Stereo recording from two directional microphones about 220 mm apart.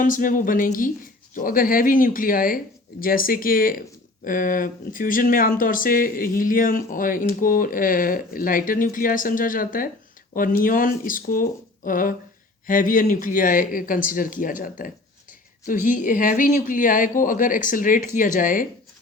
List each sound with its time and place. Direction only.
0.0 s speech: 35° left (ahead or behind)